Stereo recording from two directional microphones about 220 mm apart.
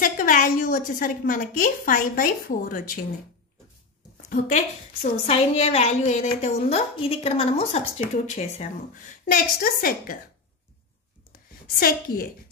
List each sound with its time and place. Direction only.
0.0 s a woman's voice: 40° left (ahead or behind)
4.2 s a woman's voice: 35° left (ahead or behind)
11.7 s a woman's voice: 40° left (ahead or behind)